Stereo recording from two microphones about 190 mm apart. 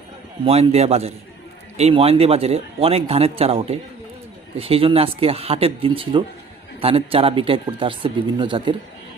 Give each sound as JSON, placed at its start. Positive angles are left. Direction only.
{"t": 0.4, "sound": "a man's voice", "side_deg": -30}